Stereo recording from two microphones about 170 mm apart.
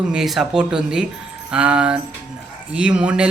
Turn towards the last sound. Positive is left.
turn(degrees=-5)  # may be behind; listen again after turning